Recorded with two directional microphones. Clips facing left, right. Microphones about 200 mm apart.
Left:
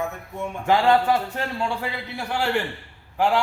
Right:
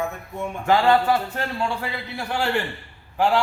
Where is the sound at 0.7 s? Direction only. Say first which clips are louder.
Even; 15° left (ahead or behind).